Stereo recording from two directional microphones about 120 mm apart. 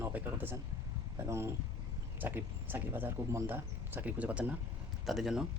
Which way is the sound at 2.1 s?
15° right (ahead or behind).